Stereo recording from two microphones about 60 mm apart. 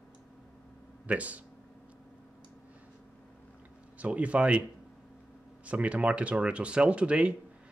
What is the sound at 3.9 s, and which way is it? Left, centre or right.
Speech, right.